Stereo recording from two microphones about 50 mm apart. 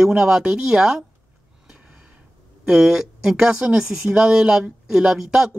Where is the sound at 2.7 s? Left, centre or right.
Centre.